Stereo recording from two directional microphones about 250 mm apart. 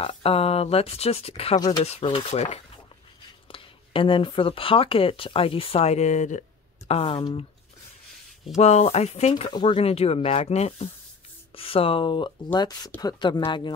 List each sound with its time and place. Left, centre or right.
0.0 s speech: left
8.5 s speech: left